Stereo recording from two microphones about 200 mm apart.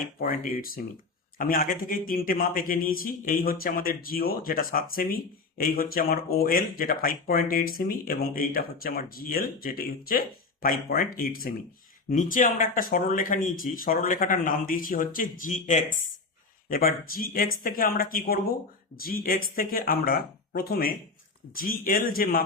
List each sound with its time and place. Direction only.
0.2 s a man's voice: 45° left (ahead or behind)